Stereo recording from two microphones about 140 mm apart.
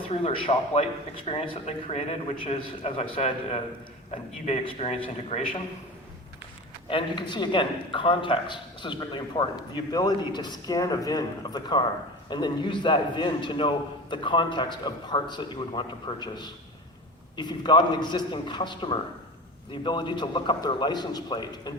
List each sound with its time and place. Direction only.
0.1 s a man's voice: 40° left (ahead or behind)
6.9 s a man's voice: 35° left (ahead or behind)